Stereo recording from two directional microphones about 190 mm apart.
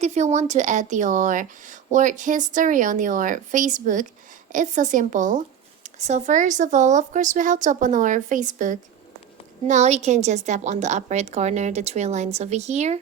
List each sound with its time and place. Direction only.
0.0 s a woman's voice: 35° right (ahead or behind)